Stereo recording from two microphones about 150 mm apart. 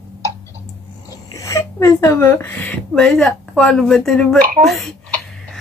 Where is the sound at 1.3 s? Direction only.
20° left (ahead or behind); by 4.3 s 5° left (ahead or behind).